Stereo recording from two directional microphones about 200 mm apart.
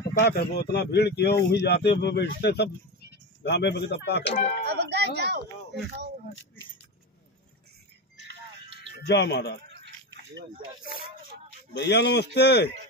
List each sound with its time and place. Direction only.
0.2 s a man's voice: 55° left (ahead or behind)
4.3 s speech: 35° left (ahead or behind)
4.6 s a sound: 55° right (ahead or behind)
9.0 s a man's voice: 55° left (ahead or behind)
9.7 s a sound: 55° right (ahead or behind)
11.7 s a man's voice: 60° left (ahead or behind)